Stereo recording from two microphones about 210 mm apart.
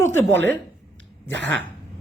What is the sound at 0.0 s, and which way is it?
Speech, 10° left (ahead or behind).